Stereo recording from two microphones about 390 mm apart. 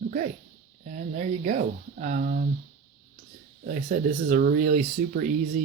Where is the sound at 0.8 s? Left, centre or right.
Centre.